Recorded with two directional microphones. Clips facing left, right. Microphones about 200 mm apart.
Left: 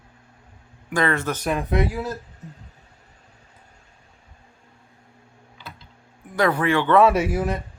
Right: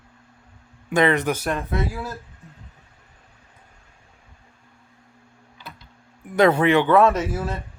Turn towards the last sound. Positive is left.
turn(degrees=15)  # may be behind; listen again after turning